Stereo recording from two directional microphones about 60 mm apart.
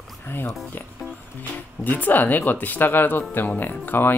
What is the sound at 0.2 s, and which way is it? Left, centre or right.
Speech, left.